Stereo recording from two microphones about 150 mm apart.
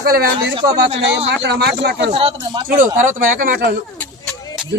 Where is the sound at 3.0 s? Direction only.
60° right (ahead or behind); by 3.7 s 75° right (ahead or behind).